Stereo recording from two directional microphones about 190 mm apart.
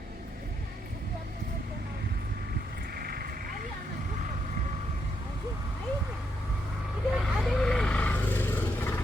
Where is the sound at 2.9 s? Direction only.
50° right (ahead or behind).